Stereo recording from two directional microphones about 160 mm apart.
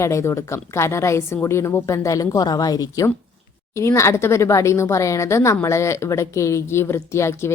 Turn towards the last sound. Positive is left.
turn(degrees=15)  # may be behind; listen again after turning